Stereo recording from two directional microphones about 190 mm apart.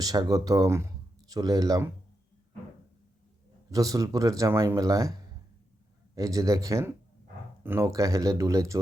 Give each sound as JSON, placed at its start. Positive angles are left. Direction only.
{"t": 0.0, "sound": "speech", "side_deg": -20}
{"t": 3.7, "sound": "a man's voice", "side_deg": -20}
{"t": 6.1, "sound": "a man's voice", "side_deg": -15}